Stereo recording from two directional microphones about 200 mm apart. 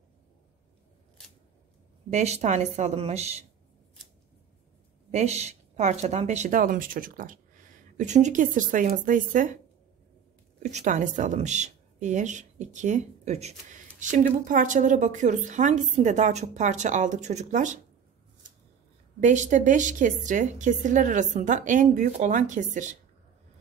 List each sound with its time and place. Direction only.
2.0 s a woman's voice: 35° right (ahead or behind)
5.1 s a woman's voice: 35° right (ahead or behind)
10.6 s a woman's voice: 35° right (ahead or behind)
19.1 s a woman's voice: 35° right (ahead or behind)